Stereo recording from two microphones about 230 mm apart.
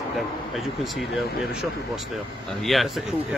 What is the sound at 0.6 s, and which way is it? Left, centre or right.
Speech, centre.